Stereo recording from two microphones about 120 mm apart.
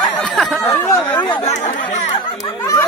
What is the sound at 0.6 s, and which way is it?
Chatter, 20° left (ahead or behind).